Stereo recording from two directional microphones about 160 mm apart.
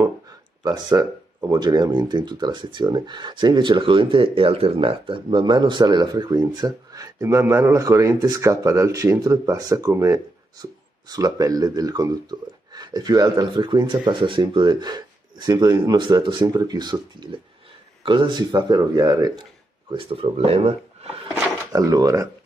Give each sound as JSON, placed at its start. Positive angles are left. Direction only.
{"t": 0.7, "sound": "speech", "side_deg": -25}
{"t": 21.7, "sound": "speech", "side_deg": -20}